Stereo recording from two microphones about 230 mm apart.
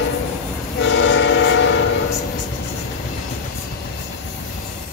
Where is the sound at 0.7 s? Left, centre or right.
Left.